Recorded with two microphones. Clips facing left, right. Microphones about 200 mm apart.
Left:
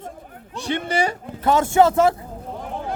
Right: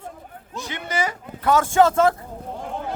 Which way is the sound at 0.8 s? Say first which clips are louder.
Even; 30° left (ahead or behind).